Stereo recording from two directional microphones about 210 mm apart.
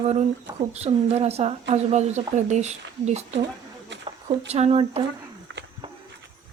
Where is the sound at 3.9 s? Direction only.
60° right (ahead or behind).